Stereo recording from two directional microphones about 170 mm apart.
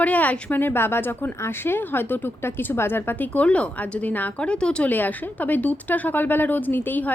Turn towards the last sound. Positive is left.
turn(degrees=10)  # may be behind; listen again after turning